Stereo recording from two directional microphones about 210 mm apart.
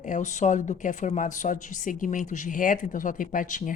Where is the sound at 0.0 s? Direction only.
35° left (ahead or behind).